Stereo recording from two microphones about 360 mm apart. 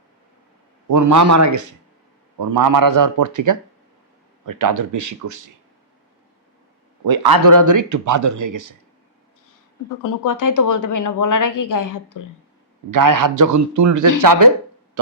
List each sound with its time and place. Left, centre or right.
0.9 s speech: right
7.0 s speech: right
10.0 s speech: left
12.9 s speech: right